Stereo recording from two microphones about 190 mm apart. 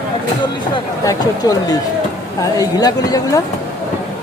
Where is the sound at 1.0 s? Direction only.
20° left (ahead or behind).